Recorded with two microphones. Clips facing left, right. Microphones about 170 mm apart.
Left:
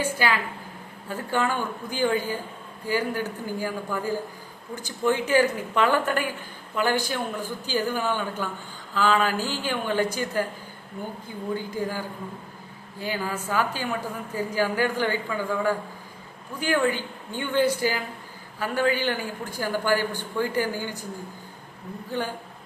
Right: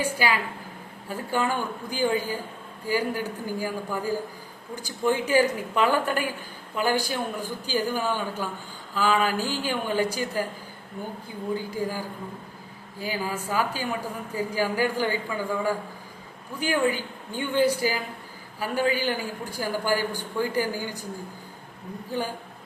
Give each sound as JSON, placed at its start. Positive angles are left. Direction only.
{"t": 0.0, "sound": "speech", "side_deg": -10}
{"t": 11.5, "sound": "speech", "side_deg": -10}